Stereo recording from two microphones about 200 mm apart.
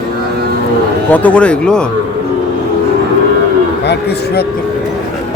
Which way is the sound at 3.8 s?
55° left (ahead or behind).